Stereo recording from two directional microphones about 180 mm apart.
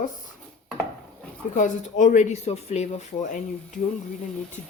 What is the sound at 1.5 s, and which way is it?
Speech, 45° left (ahead or behind).